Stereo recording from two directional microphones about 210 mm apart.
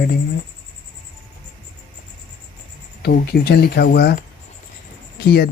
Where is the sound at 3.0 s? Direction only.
50° left (ahead or behind).